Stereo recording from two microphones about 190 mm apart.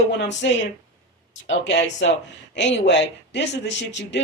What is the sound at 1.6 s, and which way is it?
Speech, 70° left (ahead or behind).